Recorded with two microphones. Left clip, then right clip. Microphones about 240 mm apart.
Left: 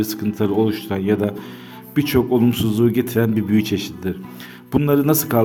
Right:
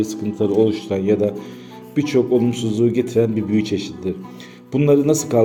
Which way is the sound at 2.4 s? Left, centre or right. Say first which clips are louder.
Left 1 dB; left.